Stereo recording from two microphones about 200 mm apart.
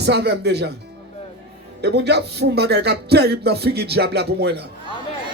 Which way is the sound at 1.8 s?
55° right (ahead or behind).